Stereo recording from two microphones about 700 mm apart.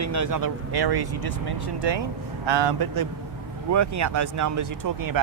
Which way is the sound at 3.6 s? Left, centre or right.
Right.